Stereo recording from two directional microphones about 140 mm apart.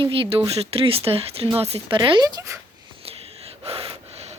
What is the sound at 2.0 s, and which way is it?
Speech, 30° right (ahead or behind).